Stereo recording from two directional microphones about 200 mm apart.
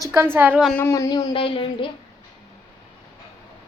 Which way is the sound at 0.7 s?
15° left (ahead or behind).